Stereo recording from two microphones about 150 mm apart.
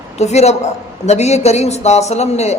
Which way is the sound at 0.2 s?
45° left (ahead or behind).